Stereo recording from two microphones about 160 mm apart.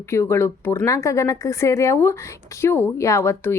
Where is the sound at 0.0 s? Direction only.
15° left (ahead or behind).